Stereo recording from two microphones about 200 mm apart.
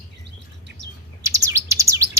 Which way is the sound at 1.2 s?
15° right (ahead or behind).